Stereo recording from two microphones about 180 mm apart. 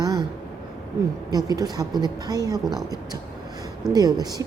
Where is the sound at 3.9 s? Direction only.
20° right (ahead or behind).